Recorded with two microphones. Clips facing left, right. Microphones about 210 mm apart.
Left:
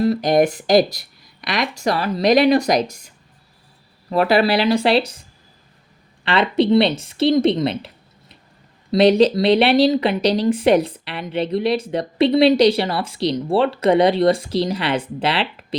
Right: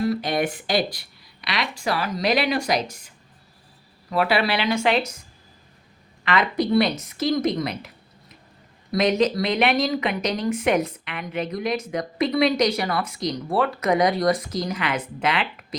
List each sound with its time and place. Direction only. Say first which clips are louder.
0.0 s speech: left 7 dB; 40° left (ahead or behind)
4.1 s speech: left 6 dB; 40° left (ahead or behind)
6.2 s speech: left 5 dB; 30° left (ahead or behind)
8.9 s speech: left 7 dB; 30° left (ahead or behind)